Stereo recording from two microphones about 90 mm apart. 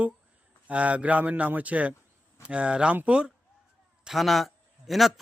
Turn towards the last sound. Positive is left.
turn(degrees=0)  # may be behind; listen again after turning